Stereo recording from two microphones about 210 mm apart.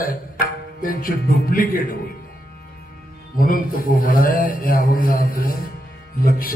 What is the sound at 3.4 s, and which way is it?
A man's voice, 40° left (ahead or behind).